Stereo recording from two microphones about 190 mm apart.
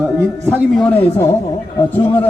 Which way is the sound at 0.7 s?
10° left (ahead or behind).